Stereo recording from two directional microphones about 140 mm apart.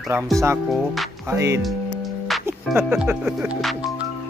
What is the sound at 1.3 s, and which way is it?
Speech, 20° right (ahead or behind).